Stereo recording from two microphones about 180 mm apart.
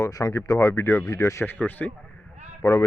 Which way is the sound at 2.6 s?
20° left (ahead or behind).